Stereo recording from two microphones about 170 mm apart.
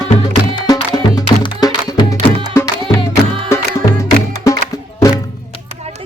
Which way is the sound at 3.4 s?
15° left (ahead or behind).